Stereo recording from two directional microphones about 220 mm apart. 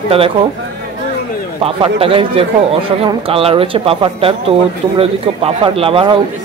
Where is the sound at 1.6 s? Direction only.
25° right (ahead or behind).